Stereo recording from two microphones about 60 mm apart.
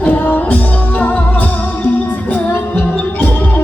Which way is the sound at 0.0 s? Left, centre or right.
Left.